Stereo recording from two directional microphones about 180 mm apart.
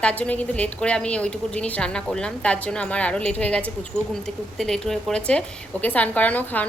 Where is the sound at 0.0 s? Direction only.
5° left (ahead or behind).